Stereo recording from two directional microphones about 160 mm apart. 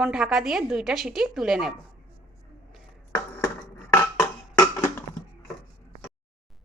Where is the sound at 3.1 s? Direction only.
15° left (ahead or behind).